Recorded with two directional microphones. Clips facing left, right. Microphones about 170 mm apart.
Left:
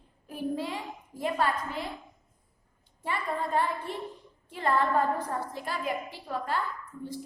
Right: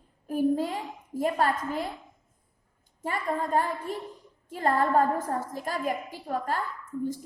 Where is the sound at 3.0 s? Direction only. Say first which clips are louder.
Right 2 dB; 45° right (ahead or behind).